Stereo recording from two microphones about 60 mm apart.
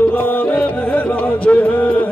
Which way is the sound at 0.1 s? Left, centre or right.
Left.